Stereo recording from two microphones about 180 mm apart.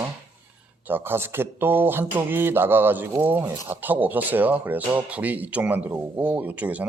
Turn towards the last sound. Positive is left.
turn(degrees=-10)  # may be behind; listen again after turning